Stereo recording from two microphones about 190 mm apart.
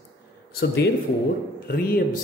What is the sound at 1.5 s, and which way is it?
Speech, 50° left (ahead or behind).